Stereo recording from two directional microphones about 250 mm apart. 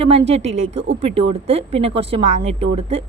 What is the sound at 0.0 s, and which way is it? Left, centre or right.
Speech, right.